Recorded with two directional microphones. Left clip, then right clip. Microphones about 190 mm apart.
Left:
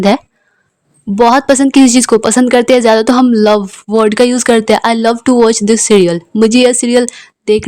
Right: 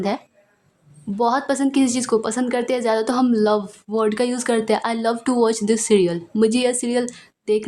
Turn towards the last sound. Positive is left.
turn(degrees=40)  # may be behind; listen again after turning